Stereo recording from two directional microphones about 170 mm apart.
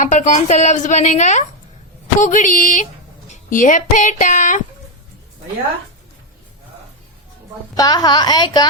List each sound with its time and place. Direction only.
0.0 s a woman's voice: 45° left (ahead or behind)
7.8 s a woman's voice: 25° left (ahead or behind)